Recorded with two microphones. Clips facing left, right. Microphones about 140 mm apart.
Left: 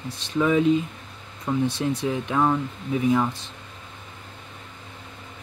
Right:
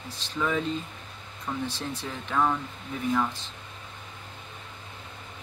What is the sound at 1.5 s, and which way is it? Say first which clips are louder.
Speech: left 8 dB; 25° left (ahead or behind).